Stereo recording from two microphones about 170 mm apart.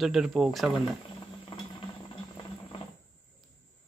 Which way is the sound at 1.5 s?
30° left (ahead or behind).